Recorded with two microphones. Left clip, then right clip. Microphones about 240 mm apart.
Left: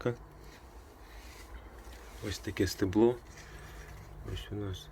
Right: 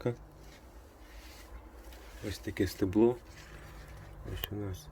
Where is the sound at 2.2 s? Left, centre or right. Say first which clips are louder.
Left 1 dB; centre.